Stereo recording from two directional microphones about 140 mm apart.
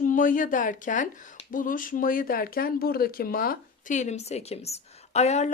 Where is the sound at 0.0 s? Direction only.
70° left (ahead or behind).